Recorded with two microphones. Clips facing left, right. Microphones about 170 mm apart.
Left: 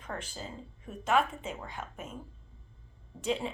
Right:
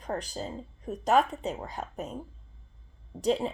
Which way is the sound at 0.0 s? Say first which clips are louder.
Right 6 dB; 40° right (ahead or behind).